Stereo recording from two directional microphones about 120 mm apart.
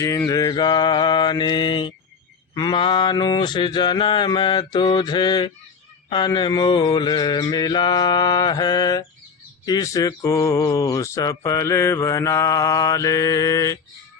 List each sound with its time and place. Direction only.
0.0 s mantra: 25° left (ahead or behind)
9.6 s speech: 30° left (ahead or behind)